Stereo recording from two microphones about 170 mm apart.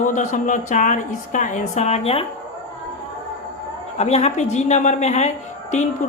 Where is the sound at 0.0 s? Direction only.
45° left (ahead or behind).